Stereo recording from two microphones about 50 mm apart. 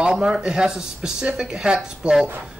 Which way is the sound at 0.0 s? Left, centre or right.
Centre.